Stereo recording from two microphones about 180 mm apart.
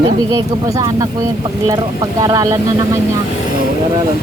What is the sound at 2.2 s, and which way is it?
Speech, 20° right (ahead or behind).